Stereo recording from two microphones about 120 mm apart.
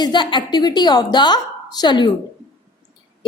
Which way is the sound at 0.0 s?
40° left (ahead or behind).